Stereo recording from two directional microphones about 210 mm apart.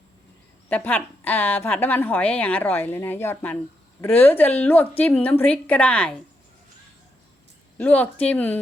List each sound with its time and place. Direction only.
0.7 s a woman's voice: 5° left (ahead or behind)
7.8 s a woman's voice: 5° left (ahead or behind)